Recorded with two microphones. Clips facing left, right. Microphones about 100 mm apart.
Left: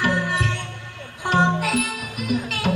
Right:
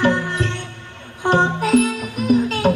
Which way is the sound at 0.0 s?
35° right (ahead or behind).